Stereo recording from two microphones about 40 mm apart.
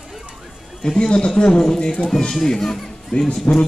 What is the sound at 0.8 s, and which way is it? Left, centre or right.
Speech, left.